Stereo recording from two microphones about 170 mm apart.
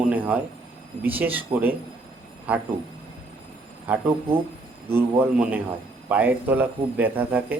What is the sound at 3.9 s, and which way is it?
A man's voice, 10° right (ahead or behind).